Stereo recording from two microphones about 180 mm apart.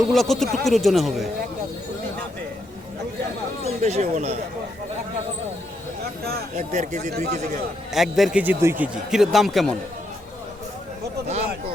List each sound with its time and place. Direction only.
0.1 s a man's voice: centre (ahead or behind)
3.8 s speech: 40° right (ahead or behind)
6.6 s speech: 40° right (ahead or behind)
7.9 s a man's voice: centre (ahead or behind)